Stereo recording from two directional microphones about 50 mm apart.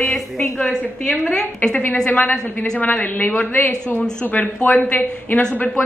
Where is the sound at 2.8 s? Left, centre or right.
Left.